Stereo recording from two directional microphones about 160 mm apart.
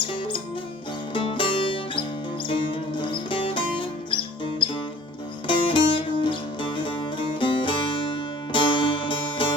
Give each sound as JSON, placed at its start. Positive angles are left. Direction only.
{"t": 0.1, "sound": "music", "side_deg": 30}
{"t": 5.5, "sound": "music", "side_deg": 30}